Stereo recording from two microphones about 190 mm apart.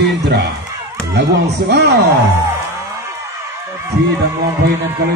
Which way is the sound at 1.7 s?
60° right (ahead or behind).